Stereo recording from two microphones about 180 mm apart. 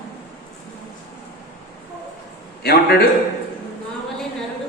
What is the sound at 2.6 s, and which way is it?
Speech, 60° left (ahead or behind).